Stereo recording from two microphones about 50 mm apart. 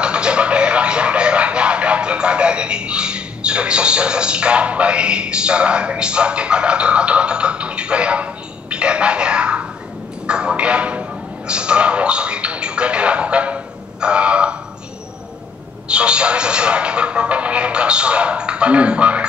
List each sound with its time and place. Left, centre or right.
0.0 s music: centre
10.2 s a sound: centre
15.9 s speech: right